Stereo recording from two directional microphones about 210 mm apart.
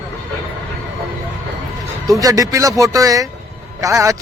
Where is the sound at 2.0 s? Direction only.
15° right (ahead or behind).